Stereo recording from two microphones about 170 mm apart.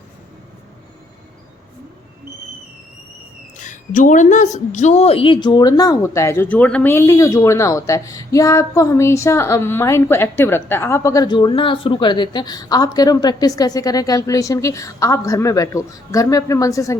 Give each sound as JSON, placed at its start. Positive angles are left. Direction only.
{"t": 3.6, "sound": "a woman's voice", "side_deg": 50}